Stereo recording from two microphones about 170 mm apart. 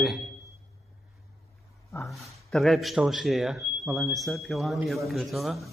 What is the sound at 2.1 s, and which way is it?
Speech, centre (ahead or behind).